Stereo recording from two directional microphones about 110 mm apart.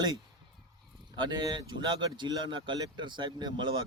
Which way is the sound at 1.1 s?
45° right (ahead or behind).